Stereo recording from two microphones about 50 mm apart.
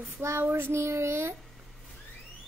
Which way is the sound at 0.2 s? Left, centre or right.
Right.